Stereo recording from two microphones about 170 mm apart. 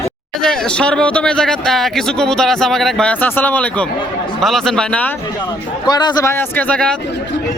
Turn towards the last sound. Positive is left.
turn(degrees=10)  # may be behind; listen again after turning